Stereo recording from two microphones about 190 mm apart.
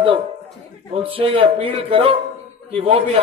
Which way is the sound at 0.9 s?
30° right (ahead or behind).